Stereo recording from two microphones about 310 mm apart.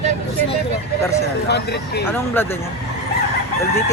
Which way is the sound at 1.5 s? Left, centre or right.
Left.